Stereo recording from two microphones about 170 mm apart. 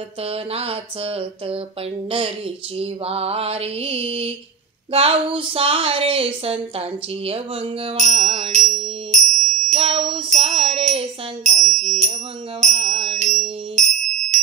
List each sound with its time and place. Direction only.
0.2 s speech: 35° right (ahead or behind)
9.4 s jingle bell: 5° left (ahead or behind)
9.7 s a sound: 40° right (ahead or behind)
14.3 s bell: 45° right (ahead or behind)